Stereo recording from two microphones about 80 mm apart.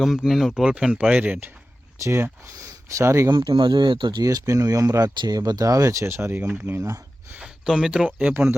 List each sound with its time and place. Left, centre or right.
0.0 s speech: centre; by 1.5 s right
2.9 s speech: right
3.3 s speech: right
4.2 s speech: right
7.3 s speech: centre
8.2 s speech: right